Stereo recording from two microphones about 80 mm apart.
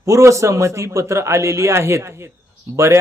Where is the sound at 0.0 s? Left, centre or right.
Right.